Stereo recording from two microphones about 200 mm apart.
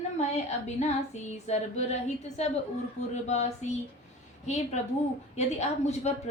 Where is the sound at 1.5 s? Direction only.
35° left (ahead or behind).